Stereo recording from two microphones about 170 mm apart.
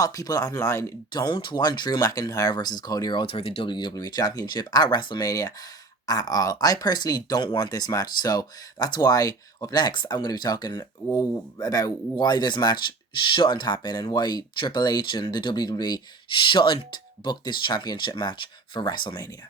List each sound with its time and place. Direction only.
0.0 s speech: 20° left (ahead or behind)